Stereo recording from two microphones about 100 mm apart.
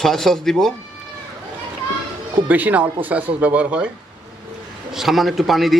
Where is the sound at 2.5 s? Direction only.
15° right (ahead or behind).